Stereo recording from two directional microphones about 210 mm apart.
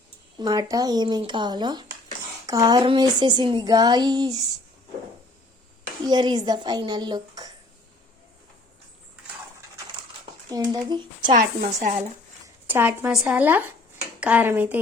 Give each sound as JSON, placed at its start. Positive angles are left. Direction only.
{"t": 0.3, "sound": "speech", "side_deg": -15}
{"t": 6.1, "sound": "speech", "side_deg": -20}
{"t": 10.5, "sound": "speech", "side_deg": -20}
{"t": 11.3, "sound": "a woman's voice", "side_deg": -35}
{"t": 12.6, "sound": "speech", "side_deg": -10}